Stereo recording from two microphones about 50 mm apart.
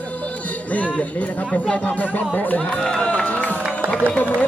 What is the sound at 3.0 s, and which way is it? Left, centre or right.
Run, left.